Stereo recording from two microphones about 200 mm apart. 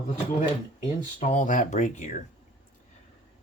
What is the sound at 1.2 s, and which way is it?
Speech, 35° left (ahead or behind).